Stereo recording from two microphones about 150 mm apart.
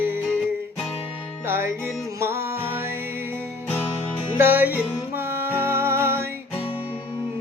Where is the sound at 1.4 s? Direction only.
15° right (ahead or behind).